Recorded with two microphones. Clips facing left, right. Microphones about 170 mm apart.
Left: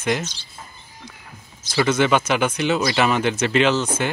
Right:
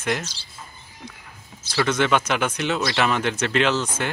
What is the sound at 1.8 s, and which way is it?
Speech, 5° left (ahead or behind).